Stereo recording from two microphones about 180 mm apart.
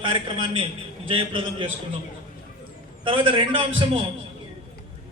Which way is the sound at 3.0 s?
30° right (ahead or behind).